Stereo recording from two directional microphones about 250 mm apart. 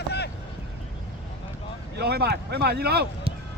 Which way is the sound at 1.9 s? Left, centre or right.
Right.